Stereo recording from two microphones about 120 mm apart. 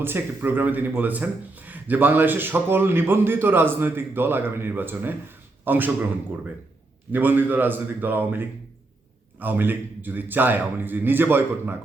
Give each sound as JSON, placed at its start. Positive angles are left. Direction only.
{"t": 0.0, "sound": "speech", "side_deg": -15}
{"t": 7.1, "sound": "speech", "side_deg": -15}